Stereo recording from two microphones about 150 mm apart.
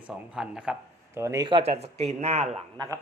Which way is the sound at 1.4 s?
40° right (ahead or behind).